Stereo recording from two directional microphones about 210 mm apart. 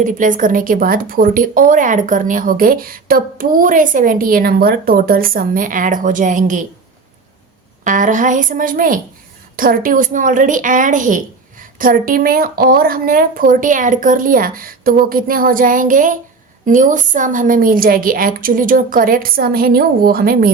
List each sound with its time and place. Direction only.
0.0 s a woman's voice: 40° right (ahead or behind)
7.9 s a woman's voice: 40° right (ahead or behind)